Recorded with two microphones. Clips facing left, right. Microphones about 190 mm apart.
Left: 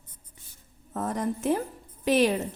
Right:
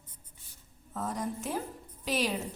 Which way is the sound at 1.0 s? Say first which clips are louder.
Left 6 dB; 65° left (ahead or behind).